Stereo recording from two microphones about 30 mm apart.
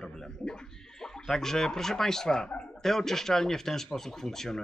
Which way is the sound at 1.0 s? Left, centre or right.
Centre.